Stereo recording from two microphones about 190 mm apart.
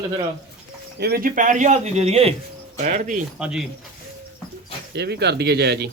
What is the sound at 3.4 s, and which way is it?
Speech, 5° right (ahead or behind).